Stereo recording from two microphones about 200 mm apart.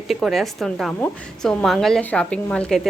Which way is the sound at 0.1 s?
Centre (ahead or behind).